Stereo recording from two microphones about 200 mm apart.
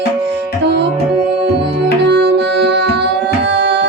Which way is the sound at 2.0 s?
55° right (ahead or behind).